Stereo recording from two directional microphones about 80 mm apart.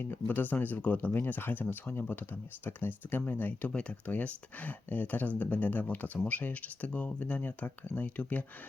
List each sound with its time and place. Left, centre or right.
0.0 s speech: left